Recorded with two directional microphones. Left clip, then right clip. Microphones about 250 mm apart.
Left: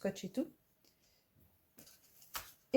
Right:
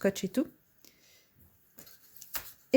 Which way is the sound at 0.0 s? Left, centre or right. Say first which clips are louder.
Right 9 dB; right.